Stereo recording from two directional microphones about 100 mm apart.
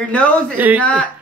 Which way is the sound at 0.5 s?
15° right (ahead or behind).